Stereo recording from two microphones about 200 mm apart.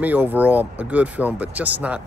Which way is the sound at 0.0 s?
10° right (ahead or behind).